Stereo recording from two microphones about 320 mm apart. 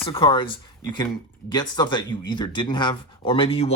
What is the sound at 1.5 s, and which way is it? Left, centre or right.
Speech, centre.